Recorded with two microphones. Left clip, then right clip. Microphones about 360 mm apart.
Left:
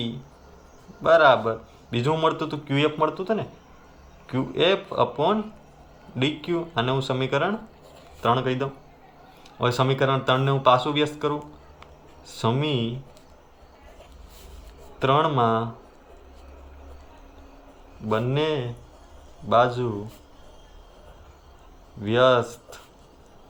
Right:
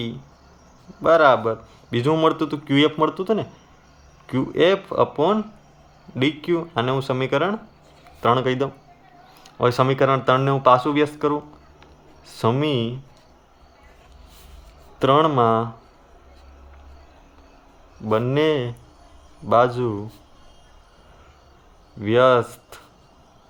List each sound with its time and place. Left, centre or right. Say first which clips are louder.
1.0 s speech: right 2 dB; centre
14.9 s speech: right 4 dB; centre
18.1 s speech: right 5 dB; centre
22.0 s speech: right 3 dB; centre